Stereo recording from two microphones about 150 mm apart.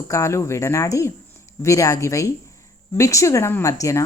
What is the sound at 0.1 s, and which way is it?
A woman's voice, 20° left (ahead or behind).